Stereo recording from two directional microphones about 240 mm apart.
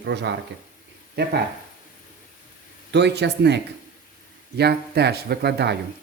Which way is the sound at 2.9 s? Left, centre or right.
Right.